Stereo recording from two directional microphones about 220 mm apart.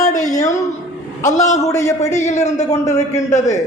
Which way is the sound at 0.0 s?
15° left (ahead or behind).